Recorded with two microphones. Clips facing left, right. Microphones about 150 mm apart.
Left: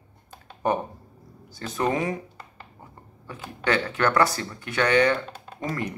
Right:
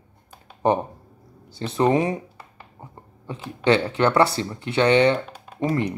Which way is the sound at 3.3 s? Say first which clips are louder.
Right 6 dB; 25° right (ahead or behind).